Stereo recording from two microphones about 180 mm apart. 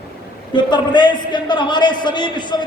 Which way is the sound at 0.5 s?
25° left (ahead or behind).